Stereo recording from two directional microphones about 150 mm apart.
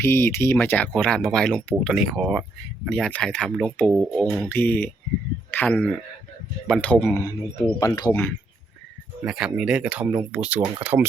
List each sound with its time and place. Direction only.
0.0 s speech: 15° left (ahead or behind); by 2.4 s 5° right (ahead or behind)
2.8 s speech: 5° left (ahead or behind); by 8.1 s 25° left (ahead or behind)
9.2 s speech: 5° right (ahead or behind)